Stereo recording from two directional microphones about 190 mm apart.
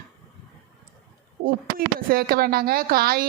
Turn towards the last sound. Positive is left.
turn(degrees=-50)  # may be behind; listen again after turning